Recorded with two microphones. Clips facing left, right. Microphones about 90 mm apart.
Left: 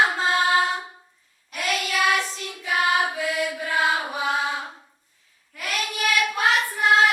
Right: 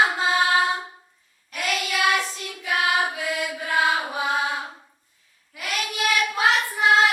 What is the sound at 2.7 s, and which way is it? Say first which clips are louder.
Chant: left 1 dB; centre (ahead or behind).